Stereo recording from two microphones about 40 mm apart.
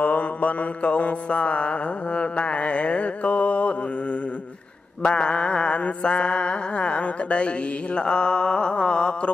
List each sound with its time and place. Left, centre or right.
0.0 s mantra: left
5.0 s mantra: left